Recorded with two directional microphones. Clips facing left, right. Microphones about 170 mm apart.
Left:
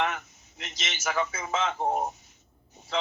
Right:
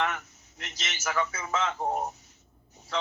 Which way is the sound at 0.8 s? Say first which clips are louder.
Left 1 dB; 20° left (ahead or behind).